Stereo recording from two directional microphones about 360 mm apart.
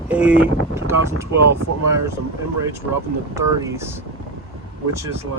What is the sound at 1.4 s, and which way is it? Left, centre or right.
Speech, right.